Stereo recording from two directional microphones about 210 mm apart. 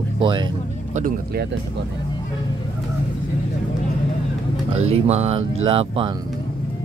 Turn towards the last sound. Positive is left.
turn(degrees=-25)  # may be behind; listen again after turning